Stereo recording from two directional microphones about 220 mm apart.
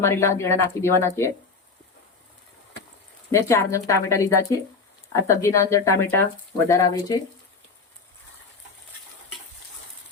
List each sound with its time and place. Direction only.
0.0 s speech: 10° left (ahead or behind)
3.3 s speech: 10° left (ahead or behind)